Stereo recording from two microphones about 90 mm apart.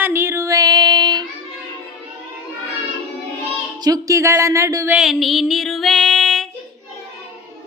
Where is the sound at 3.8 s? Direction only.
40° right (ahead or behind).